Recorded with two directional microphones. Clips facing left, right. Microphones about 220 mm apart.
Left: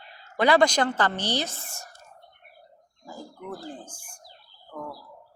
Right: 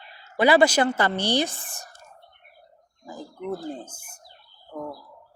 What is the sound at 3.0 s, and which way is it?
Speech, 20° right (ahead or behind).